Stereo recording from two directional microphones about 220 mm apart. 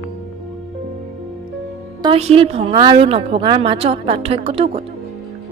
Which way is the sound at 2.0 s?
25° right (ahead or behind).